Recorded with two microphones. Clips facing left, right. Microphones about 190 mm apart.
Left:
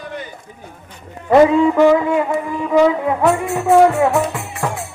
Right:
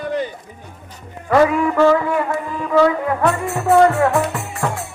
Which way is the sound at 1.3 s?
20° left (ahead or behind).